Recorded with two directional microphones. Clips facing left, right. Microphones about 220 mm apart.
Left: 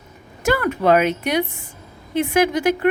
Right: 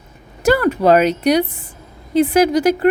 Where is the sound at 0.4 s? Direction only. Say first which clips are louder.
Right 4 dB; 35° right (ahead or behind).